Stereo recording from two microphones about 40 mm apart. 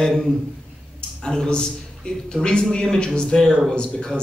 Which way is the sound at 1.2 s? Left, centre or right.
Centre.